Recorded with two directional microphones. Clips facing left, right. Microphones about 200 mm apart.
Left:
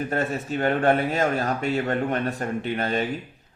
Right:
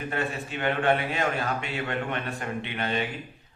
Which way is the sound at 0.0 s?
40° left (ahead or behind).